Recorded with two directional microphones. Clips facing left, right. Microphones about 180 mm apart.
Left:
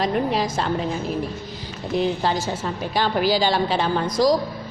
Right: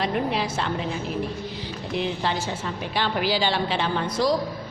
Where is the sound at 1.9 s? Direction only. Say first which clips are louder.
Left 5 dB; 40° left (ahead or behind).